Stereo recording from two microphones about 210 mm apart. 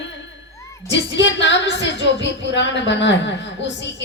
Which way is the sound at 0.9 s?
60° left (ahead or behind).